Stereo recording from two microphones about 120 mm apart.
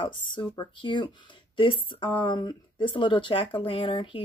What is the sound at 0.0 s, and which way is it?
Speech, 45° left (ahead or behind).